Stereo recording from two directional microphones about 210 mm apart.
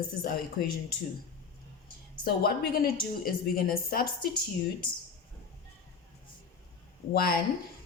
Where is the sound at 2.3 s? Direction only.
45° left (ahead or behind).